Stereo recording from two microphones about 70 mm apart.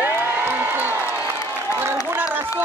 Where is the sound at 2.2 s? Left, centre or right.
Right.